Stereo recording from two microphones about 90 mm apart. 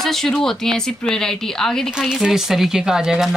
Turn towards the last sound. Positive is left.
turn(degrees=-5)  # may be behind; listen again after turning